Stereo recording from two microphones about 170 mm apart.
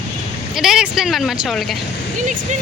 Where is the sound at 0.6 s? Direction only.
5° right (ahead or behind).